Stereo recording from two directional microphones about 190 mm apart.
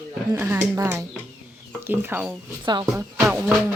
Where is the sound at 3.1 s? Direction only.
10° right (ahead or behind).